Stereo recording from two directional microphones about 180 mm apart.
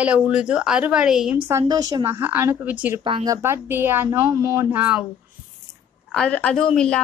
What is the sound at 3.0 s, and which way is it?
Speech, 30° right (ahead or behind).